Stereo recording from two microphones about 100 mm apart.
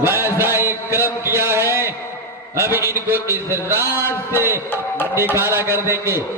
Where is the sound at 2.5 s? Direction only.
25° right (ahead or behind).